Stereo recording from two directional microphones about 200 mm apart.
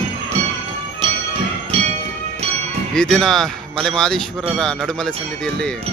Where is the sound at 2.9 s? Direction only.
5° left (ahead or behind).